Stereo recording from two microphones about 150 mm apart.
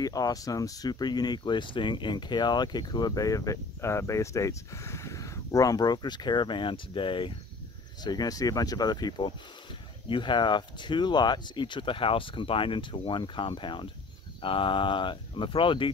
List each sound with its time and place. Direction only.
0.0 s speech: 25° left (ahead or behind)